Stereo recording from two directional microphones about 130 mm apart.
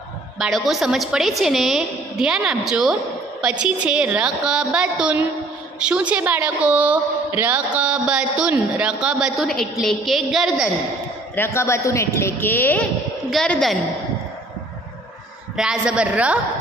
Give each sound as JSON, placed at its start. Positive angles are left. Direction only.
{"t": 0.4, "sound": "a woman's voice", "side_deg": 0}
{"t": 11.3, "sound": "speech", "side_deg": 20}
{"t": 13.3, "sound": "a woman's voice", "side_deg": 5}
{"t": 15.5, "sound": "a woman's voice", "side_deg": -5}